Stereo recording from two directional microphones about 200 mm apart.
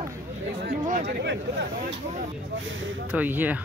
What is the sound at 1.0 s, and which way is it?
Speech, 60° right (ahead or behind).